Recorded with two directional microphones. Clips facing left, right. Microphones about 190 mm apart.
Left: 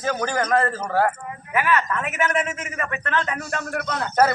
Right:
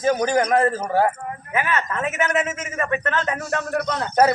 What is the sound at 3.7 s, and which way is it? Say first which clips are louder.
Speech: right 4 dB; 35° right (ahead or behind).